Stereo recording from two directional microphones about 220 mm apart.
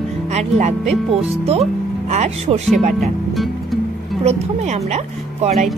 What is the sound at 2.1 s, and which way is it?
Speech, 30° right (ahead or behind).